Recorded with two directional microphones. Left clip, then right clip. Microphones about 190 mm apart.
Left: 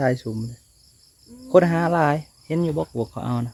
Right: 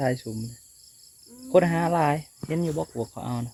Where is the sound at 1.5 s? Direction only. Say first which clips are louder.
Left 4 dB; 25° left (ahead or behind).